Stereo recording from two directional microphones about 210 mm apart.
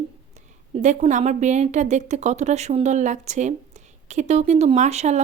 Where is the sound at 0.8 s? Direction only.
35° right (ahead or behind).